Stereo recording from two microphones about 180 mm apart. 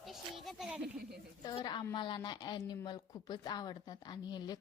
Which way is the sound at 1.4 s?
25° left (ahead or behind).